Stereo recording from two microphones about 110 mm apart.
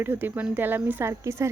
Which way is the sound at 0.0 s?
20° right (ahead or behind).